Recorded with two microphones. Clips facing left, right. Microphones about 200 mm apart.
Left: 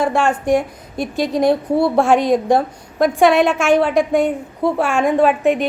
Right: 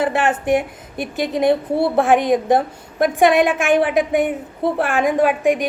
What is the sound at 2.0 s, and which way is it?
Speech, 55° right (ahead or behind).